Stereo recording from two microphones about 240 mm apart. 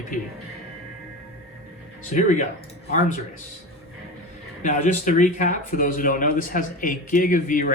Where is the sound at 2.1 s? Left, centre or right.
Left.